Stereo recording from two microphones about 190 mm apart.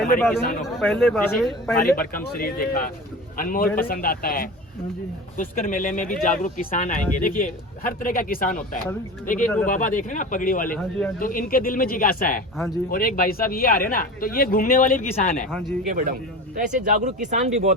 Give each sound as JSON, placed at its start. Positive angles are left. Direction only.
{"t": 0.6, "sound": "speech", "side_deg": 0}
{"t": 1.8, "sound": "speech", "side_deg": 50}
{"t": 12.5, "sound": "speech", "side_deg": 0}
{"t": 12.9, "sound": "speech", "side_deg": 50}
{"t": 15.4, "sound": "speech", "side_deg": 0}
{"t": 15.9, "sound": "speech", "side_deg": -45}